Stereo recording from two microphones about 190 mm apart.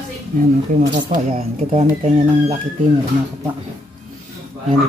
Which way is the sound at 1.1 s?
35° right (ahead or behind).